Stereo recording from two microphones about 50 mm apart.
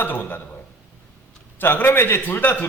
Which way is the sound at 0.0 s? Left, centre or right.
Left.